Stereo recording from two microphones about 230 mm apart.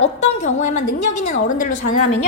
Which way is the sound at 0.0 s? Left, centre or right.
Left.